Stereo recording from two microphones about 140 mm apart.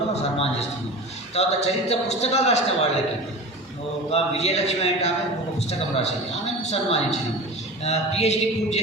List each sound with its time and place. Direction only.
0.1 s a man's voice: 50° left (ahead or behind)
4.1 s a man's voice: 50° left (ahead or behind)